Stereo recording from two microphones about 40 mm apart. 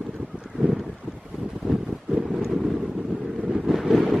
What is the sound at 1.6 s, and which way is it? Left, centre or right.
Wind noise, centre.